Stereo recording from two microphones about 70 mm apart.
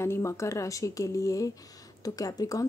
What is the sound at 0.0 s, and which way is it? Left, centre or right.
A woman's voice, left.